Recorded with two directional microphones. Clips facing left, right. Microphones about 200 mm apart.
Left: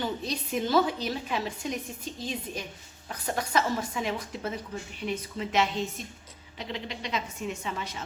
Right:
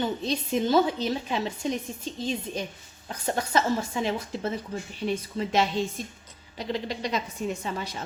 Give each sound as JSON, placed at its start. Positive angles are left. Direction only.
{"t": 0.0, "sound": "a woman's voice", "side_deg": -25}